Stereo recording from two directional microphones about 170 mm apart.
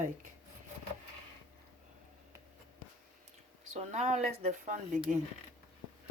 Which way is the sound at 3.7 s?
40° right (ahead or behind).